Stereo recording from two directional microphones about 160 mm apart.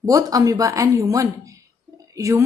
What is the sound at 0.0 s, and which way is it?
Speech, 20° right (ahead or behind).